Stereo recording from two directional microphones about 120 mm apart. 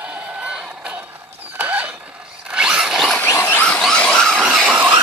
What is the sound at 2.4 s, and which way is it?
Zipper, 10° right (ahead or behind).